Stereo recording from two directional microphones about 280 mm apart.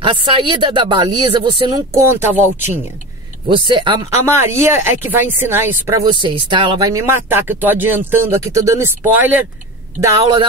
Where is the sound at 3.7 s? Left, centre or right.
Centre.